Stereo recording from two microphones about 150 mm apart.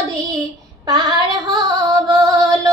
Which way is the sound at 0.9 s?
30° right (ahead or behind).